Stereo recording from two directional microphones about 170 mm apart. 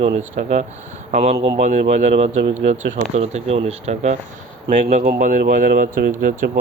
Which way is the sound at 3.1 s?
40° right (ahead or behind).